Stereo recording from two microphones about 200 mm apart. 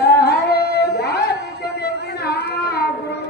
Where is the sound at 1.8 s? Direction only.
55° left (ahead or behind).